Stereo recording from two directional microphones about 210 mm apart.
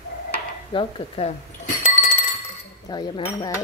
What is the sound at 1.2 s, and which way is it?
Speech, 30° left (ahead or behind).